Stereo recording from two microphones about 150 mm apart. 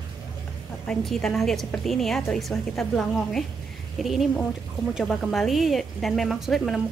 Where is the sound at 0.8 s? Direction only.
5° left (ahead or behind).